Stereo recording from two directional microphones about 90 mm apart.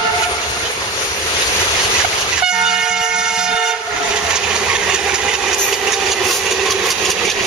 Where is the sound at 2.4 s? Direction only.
5° right (ahead or behind).